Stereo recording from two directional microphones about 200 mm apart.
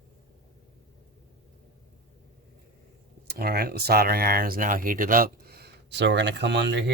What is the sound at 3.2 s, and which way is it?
Speech, 50° right (ahead or behind).